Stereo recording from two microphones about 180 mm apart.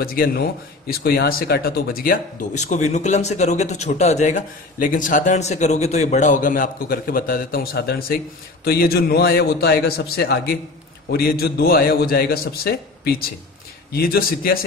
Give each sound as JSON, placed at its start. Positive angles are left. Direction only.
{"t": 0.0, "sound": "a man's voice", "side_deg": 55}